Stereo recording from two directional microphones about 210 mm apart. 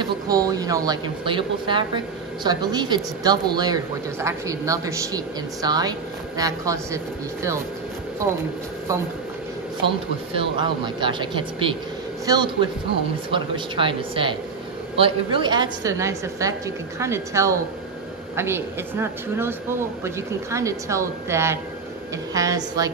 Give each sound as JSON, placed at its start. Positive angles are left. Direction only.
{"t": 0.0, "sound": "speech", "side_deg": -15}
{"t": 9.8, "sound": "speech", "side_deg": -25}
{"t": 20.5, "sound": "speech", "side_deg": -15}